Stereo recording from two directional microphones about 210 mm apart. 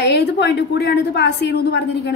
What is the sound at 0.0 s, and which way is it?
A woman's voice, 55° left (ahead or behind).